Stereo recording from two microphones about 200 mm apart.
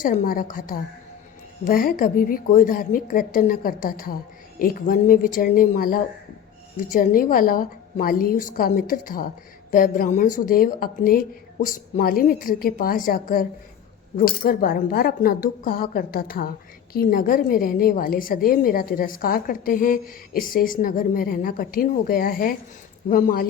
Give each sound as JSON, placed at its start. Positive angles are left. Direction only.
{"t": 0.0, "sound": "a woman's voice", "side_deg": 40}